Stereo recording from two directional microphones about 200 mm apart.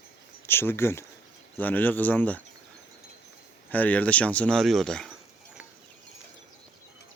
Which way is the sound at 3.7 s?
10° left (ahead or behind).